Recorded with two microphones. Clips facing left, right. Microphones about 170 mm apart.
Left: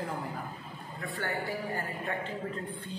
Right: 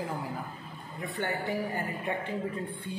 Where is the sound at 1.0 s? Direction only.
20° right (ahead or behind).